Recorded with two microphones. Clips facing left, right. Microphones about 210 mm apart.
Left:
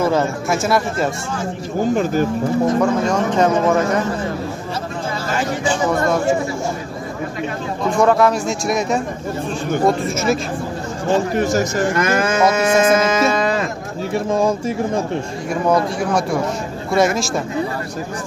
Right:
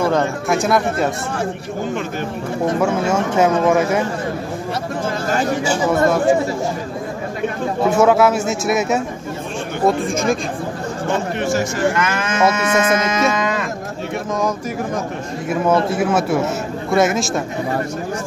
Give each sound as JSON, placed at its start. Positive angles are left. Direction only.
{"t": 0.0, "sound": "speech", "side_deg": 5}
{"t": 2.8, "sound": "speech", "side_deg": -10}
{"t": 7.9, "sound": "speech", "side_deg": -5}
{"t": 11.3, "sound": "speech", "side_deg": 40}
{"t": 13.3, "sound": "a sound", "side_deg": 35}
{"t": 14.1, "sound": "speech", "side_deg": 30}
{"t": 15.9, "sound": "speech", "side_deg": -5}